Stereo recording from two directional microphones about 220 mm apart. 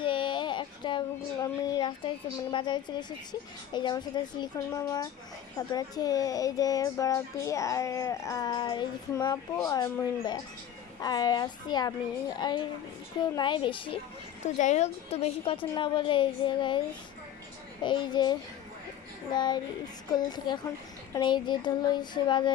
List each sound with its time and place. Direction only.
0.0 s a sound: 20° left (ahead or behind)
3.7 s a woman's voice: 20° left (ahead or behind)
17.8 s a woman's voice: 20° left (ahead or behind)